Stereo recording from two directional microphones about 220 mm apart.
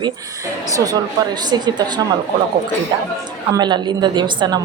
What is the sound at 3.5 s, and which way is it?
A woman's voice, 20° right (ahead or behind).